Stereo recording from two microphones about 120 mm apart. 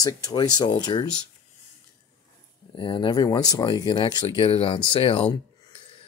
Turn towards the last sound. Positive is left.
turn(degrees=50)  # may be behind; listen again after turning